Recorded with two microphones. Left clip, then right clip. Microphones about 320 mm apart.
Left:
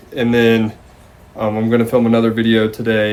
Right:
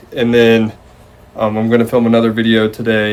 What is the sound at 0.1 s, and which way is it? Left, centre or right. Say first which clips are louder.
Speech: right 3 dB; centre.